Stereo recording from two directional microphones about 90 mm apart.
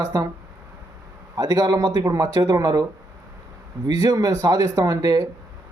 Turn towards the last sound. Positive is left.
turn(degrees=-40)  # may be behind; listen again after turning